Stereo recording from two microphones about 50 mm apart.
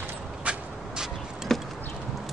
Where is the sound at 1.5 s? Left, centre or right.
Centre.